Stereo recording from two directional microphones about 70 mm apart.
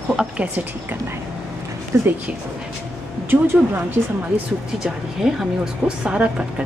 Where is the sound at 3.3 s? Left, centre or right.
Right.